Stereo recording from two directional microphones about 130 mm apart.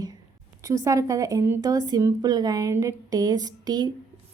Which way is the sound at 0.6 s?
25° right (ahead or behind).